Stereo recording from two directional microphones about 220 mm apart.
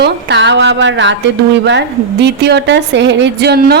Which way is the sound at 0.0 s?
50° right (ahead or behind).